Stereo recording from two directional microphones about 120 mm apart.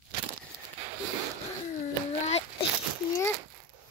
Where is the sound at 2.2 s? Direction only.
65° left (ahead or behind).